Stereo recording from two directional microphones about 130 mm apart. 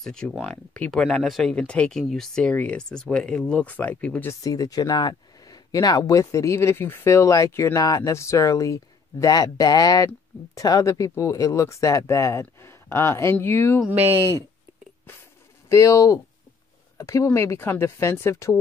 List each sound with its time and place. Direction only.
0.0 s speech: 5° left (ahead or behind)
4.3 s speech: 25° left (ahead or behind)
13.8 s speech: 15° right (ahead or behind)
15.7 s speech: 25° left (ahead or behind)